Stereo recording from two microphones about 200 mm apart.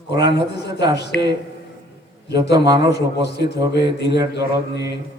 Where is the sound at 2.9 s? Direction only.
55° left (ahead or behind).